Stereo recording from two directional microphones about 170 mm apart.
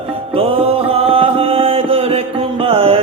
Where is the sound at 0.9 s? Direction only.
35° right (ahead or behind).